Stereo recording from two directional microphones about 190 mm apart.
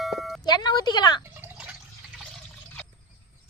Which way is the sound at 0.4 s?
20° left (ahead or behind).